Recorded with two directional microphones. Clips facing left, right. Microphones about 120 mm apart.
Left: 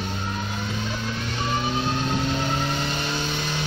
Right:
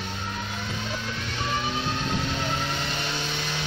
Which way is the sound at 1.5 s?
40° left (ahead or behind).